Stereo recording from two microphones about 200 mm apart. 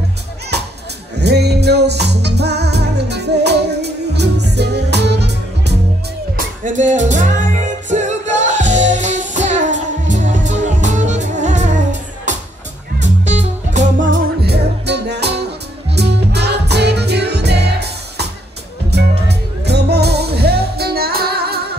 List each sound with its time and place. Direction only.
1.1 s music: 55° right (ahead or behind)
6.3 s music: 40° right (ahead or behind)
13.0 s music: 35° right (ahead or behind)
14.1 s music: 55° right (ahead or behind)